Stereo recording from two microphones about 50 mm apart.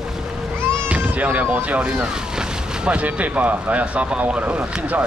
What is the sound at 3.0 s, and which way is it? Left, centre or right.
Speech, right.